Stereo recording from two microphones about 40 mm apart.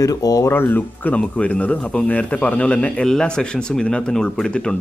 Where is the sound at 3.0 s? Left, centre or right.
Left.